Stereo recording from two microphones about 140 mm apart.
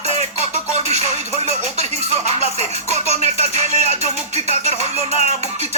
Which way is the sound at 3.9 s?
45° left (ahead or behind).